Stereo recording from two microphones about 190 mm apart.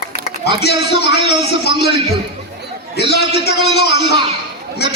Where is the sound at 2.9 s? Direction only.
60° left (ahead or behind).